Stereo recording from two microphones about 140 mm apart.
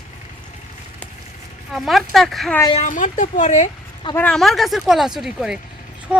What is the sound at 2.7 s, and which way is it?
Speech, 65° left (ahead or behind).